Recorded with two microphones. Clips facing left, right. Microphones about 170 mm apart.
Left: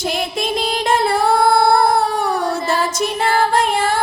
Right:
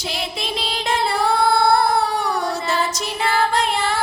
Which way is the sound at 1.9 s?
50° left (ahead or behind).